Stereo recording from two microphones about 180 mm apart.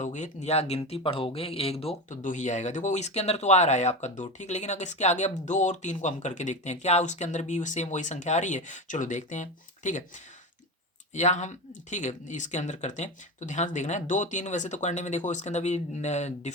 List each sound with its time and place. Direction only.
0.0 s speech: 40° left (ahead or behind)
11.1 s speech: 40° left (ahead or behind)